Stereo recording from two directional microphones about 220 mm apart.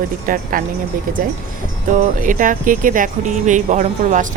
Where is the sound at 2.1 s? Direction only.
40° right (ahead or behind).